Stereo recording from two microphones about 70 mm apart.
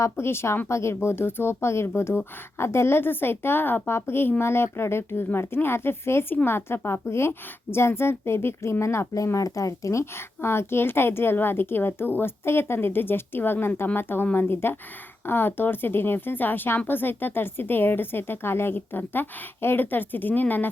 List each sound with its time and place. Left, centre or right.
0.0 s a woman's voice: left